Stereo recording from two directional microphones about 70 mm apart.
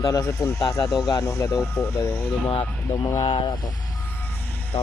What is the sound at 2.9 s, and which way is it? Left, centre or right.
Speech, left.